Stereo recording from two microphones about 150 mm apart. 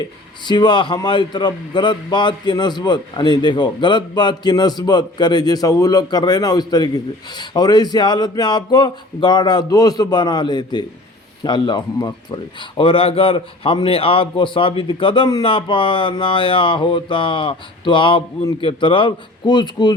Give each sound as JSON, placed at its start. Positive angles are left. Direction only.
{"t": 0.4, "sound": "a man's voice", "side_deg": 30}